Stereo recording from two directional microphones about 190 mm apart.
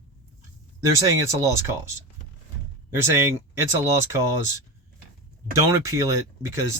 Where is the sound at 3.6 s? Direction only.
15° right (ahead or behind).